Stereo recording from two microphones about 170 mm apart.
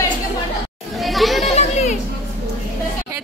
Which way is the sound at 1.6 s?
40° left (ahead or behind).